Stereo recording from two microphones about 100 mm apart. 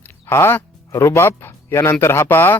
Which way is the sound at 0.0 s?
25° left (ahead or behind).